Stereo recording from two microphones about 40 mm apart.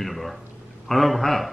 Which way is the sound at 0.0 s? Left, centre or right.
Centre.